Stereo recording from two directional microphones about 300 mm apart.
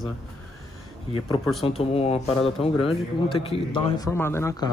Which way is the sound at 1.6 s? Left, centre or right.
Centre.